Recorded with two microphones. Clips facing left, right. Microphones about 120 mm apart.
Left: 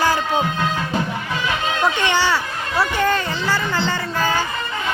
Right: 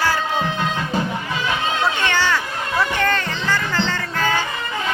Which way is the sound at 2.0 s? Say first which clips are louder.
Left 1 dB; 15° left (ahead or behind).